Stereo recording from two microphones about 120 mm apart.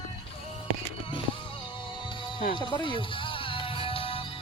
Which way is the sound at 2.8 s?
45° left (ahead or behind).